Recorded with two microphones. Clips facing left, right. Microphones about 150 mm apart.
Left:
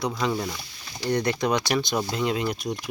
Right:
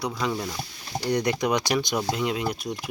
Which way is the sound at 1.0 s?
15° right (ahead or behind).